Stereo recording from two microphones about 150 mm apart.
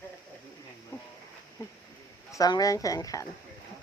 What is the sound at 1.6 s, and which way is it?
A woman's voice, 15° left (ahead or behind).